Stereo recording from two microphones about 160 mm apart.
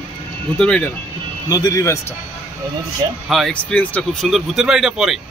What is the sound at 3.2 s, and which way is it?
Speech, centre (ahead or behind).